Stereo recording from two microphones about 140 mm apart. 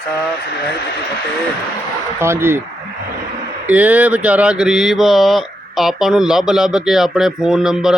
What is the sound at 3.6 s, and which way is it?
Speech, 10° right (ahead or behind).